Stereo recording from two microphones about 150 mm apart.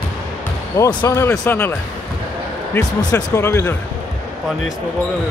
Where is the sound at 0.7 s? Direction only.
20° left (ahead or behind).